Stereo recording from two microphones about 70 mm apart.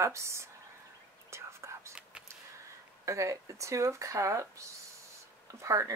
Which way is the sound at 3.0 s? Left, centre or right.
Right.